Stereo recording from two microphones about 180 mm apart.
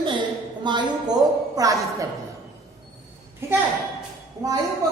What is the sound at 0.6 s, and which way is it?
A woman's voice, 25° right (ahead or behind).